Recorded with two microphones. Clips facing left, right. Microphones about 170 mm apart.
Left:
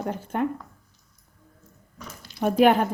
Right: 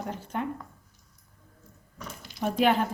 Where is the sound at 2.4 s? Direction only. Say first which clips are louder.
Left 5 dB; 55° left (ahead or behind).